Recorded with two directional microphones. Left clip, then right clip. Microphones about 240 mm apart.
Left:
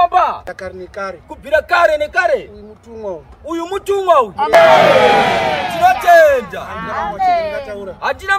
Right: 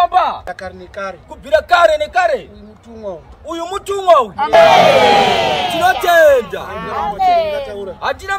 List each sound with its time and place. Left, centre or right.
0.0 s speech: centre
4.6 s speech: right
6.0 s speech: centre
6.7 s speech: right
7.7 s a man's voice: centre